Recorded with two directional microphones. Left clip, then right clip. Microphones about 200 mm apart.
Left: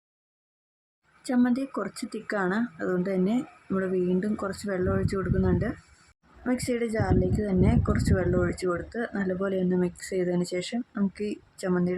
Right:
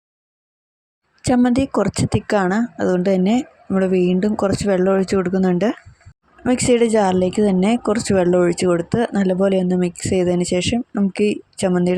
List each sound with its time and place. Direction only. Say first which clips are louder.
1.5 s speech: right 12 dB; 35° right (ahead or behind)